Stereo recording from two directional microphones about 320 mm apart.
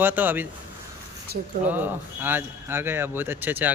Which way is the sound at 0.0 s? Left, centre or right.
Centre.